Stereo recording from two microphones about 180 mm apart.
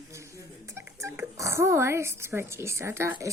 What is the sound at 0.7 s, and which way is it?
Speech, 15° right (ahead or behind).